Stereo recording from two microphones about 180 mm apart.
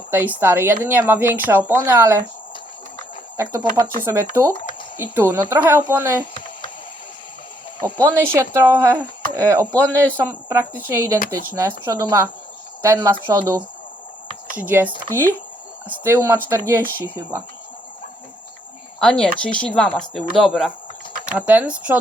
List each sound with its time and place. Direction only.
0.1 s a woman's voice: 10° right (ahead or behind)
3.3 s a woman's voice: 15° right (ahead or behind)
7.8 s a woman's voice: 10° right (ahead or behind)
14.7 s a woman's voice: 10° right (ahead or behind)
18.9 s a woman's voice: 5° left (ahead or behind)